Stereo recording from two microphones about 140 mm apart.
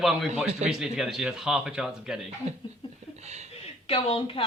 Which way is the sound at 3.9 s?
45° left (ahead or behind).